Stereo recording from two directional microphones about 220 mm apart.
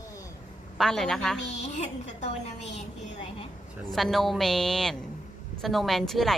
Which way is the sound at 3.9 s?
Centre (ahead or behind).